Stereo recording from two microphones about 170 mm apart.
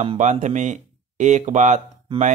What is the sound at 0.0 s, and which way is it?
Speech, 40° right (ahead or behind).